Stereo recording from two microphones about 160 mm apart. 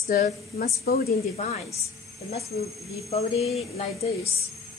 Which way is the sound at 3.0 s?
40° left (ahead or behind).